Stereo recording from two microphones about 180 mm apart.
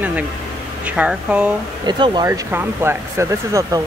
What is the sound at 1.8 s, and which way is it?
Speech, 25° right (ahead or behind).